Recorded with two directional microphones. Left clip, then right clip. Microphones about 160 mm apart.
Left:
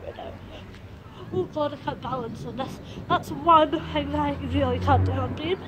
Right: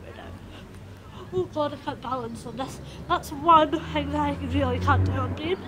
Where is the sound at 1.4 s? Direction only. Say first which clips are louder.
Even; 30° right (ahead or behind).